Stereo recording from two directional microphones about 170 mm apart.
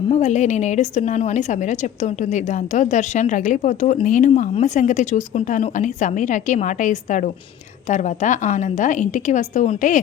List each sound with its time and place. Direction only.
0.1 s a woman's voice: 40° left (ahead or behind)